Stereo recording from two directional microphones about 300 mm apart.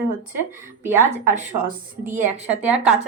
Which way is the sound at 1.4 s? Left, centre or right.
Right.